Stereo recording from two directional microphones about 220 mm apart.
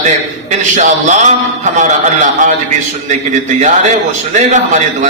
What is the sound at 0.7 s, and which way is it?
A man's voice, 35° right (ahead or behind).